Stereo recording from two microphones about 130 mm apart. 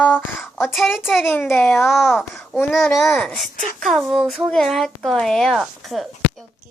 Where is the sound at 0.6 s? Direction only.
Centre (ahead or behind).